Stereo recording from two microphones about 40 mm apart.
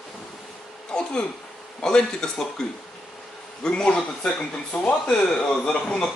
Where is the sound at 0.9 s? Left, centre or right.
Centre.